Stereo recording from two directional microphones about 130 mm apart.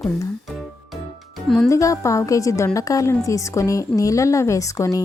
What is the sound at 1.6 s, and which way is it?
Speech, 25° left (ahead or behind).